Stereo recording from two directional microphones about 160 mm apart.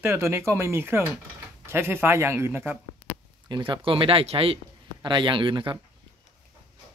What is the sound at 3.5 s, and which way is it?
A man's voice, 35° right (ahead or behind).